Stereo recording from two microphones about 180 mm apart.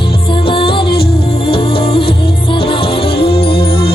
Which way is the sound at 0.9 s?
60° left (ahead or behind).